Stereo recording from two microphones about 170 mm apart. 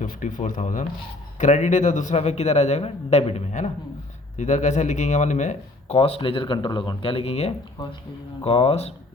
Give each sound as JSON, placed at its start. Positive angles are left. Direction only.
{"t": 0.0, "sound": "speech", "side_deg": 50}